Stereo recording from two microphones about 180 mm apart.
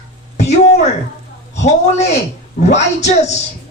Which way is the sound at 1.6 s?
40° left (ahead or behind).